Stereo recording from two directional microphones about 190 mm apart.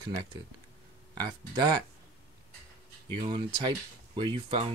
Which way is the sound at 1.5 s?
25° right (ahead or behind).